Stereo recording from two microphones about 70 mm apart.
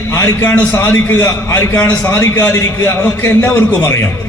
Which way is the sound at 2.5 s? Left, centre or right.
Left.